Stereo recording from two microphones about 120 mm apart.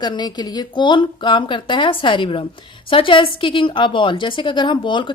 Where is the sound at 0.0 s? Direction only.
35° left (ahead or behind).